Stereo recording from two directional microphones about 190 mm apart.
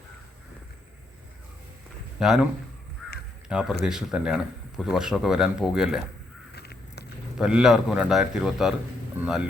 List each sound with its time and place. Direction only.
2.1 s a man's voice: 5° right (ahead or behind)
3.5 s a man's voice: 5° right (ahead or behind)
6.6 s a sound: 60° left (ahead or behind)
7.3 s a man's voice: 5° right (ahead or behind)